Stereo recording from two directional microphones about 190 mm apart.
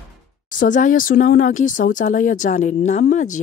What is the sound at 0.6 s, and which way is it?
Speech, 45° left (ahead or behind).